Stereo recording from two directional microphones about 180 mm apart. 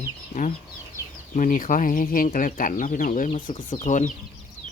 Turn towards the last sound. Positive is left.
turn(degrees=45)  # may be behind; listen again after turning